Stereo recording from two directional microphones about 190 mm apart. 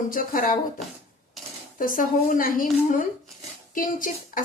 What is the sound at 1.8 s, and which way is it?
Speech, 45° left (ahead or behind).